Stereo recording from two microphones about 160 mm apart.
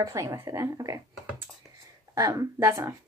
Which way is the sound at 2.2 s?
20° right (ahead or behind).